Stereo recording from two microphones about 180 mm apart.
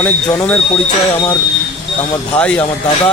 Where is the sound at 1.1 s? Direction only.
20° left (ahead or behind).